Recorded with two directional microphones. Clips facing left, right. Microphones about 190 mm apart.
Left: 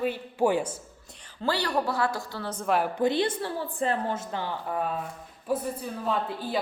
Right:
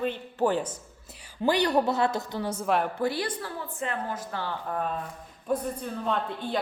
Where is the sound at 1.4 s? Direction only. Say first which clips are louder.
Right 4 dB; 20° right (ahead or behind).